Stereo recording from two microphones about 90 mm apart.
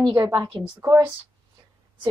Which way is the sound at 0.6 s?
55° right (ahead or behind).